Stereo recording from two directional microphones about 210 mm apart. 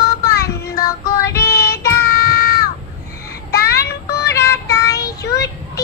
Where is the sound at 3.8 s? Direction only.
50° left (ahead or behind).